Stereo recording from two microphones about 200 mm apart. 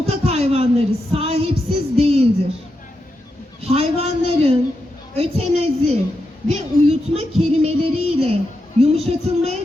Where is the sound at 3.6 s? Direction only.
30° right (ahead or behind).